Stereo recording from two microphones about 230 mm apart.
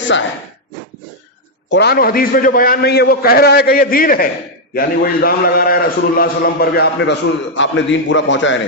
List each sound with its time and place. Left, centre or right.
0.1 s a man's voice: left
1.7 s a man's voice: left